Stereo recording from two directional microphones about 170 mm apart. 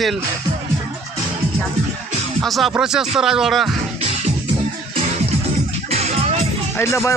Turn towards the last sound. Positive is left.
turn(degrees=15)  # may be behind; listen again after turning